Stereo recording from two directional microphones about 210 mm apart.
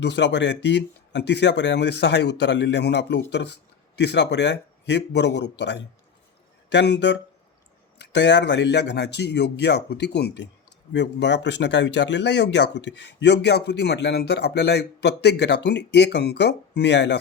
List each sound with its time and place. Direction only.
0.0 s speech: 55° left (ahead or behind)